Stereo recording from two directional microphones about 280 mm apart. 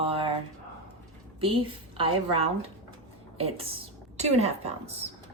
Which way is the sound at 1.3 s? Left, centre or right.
Centre.